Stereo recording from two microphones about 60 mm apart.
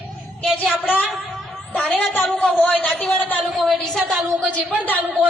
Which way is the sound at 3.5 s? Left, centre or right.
Centre.